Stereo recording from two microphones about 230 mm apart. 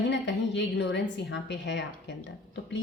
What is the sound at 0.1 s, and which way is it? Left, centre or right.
Speech, left.